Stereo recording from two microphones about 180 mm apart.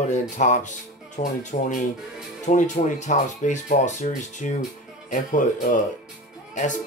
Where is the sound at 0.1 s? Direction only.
45° left (ahead or behind).